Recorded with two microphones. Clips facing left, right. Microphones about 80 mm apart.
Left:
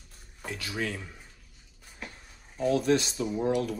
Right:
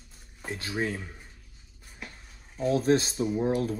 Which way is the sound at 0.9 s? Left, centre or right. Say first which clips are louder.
Right 2 dB; centre.